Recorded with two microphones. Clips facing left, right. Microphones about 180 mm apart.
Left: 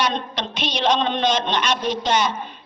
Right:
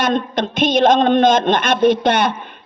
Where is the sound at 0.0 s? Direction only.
50° right (ahead or behind).